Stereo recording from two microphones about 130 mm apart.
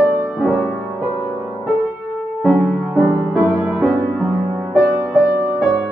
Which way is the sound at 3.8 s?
25° right (ahead or behind).